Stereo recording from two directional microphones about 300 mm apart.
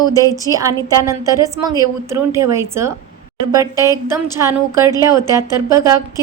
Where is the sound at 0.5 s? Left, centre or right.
Centre.